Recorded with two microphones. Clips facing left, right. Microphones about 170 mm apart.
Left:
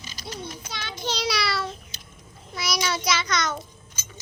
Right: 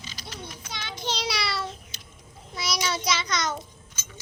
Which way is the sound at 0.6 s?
20° right (ahead or behind).